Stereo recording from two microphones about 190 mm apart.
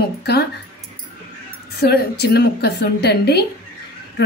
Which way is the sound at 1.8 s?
60° left (ahead or behind).